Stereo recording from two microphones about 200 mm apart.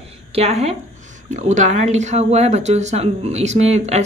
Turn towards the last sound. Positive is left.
turn(degrees=-35)  # may be behind; listen again after turning